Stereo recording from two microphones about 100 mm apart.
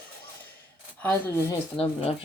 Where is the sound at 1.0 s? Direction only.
15° left (ahead or behind).